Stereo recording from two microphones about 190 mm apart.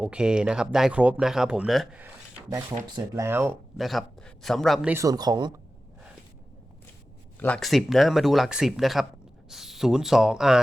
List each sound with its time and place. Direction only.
0.0 s speech: 5° right (ahead or behind)
2.9 s speech: 15° right (ahead or behind)
3.8 s speech: centre (ahead or behind)
4.9 s speech: 20° right (ahead or behind)
7.3 s speech: 5° left (ahead or behind)